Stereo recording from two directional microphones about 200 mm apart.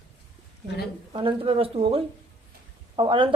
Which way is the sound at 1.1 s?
25° right (ahead or behind).